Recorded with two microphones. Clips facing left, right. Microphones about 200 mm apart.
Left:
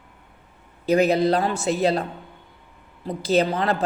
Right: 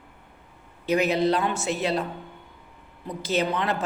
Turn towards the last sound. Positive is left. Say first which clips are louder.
# left 5 dB
turn(degrees=35)  # may be behind; listen again after turning